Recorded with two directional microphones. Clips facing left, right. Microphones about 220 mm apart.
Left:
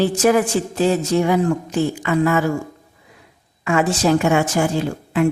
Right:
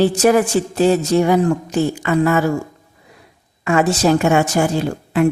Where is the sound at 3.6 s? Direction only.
40° right (ahead or behind).